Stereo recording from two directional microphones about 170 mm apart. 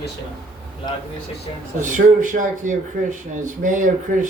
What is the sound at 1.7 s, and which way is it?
Speech, 50° right (ahead or behind).